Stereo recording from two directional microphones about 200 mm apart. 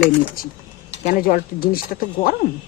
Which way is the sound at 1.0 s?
45° left (ahead or behind).